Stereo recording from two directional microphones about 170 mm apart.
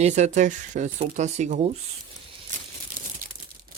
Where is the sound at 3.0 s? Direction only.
60° right (ahead or behind).